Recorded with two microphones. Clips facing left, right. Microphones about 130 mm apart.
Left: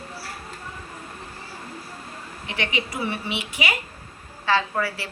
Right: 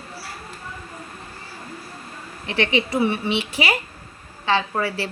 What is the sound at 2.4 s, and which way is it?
A woman's voice, 30° right (ahead or behind).